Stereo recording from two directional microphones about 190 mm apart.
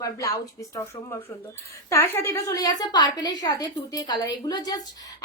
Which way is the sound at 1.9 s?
15° left (ahead or behind).